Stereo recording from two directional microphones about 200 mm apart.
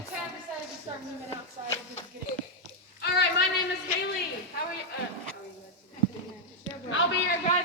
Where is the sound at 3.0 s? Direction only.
60° left (ahead or behind).